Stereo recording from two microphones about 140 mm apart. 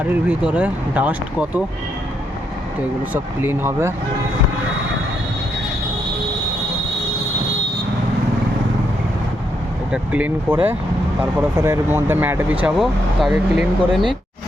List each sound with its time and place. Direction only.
0.1 s speech: 10° right (ahead or behind)
3.1 s speech: 15° right (ahead or behind)
9.9 s speech: 10° right (ahead or behind)
12.6 s speech: centre (ahead or behind)